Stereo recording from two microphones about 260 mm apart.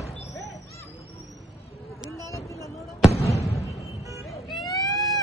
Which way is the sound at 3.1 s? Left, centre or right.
Left.